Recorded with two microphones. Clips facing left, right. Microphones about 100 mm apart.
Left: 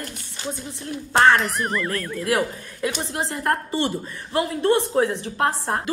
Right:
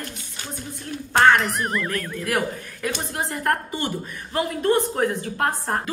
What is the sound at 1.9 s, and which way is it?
A woman's voice, 30° left (ahead or behind).